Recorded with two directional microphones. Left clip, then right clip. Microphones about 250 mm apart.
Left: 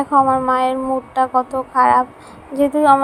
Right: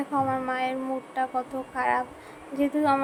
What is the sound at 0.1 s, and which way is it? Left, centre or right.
A woman's voice, centre.